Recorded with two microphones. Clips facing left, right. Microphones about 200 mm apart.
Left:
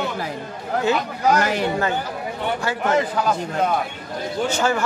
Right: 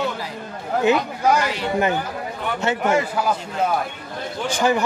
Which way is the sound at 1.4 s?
50° left (ahead or behind).